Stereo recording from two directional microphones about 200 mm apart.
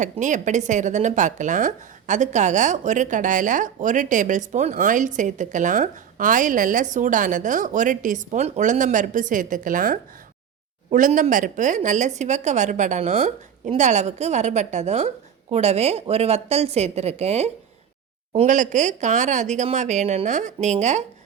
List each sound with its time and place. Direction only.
0.0 s speech: 40° right (ahead or behind)